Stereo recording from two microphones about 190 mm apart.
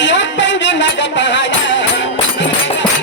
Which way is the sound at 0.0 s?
70° left (ahead or behind).